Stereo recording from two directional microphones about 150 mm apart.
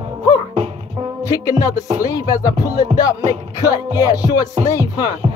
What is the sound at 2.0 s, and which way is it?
Speech, 25° left (ahead or behind).